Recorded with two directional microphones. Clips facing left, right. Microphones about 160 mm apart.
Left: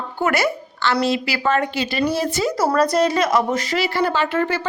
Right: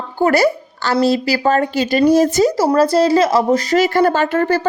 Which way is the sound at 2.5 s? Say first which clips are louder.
Right 4 dB; 25° right (ahead or behind).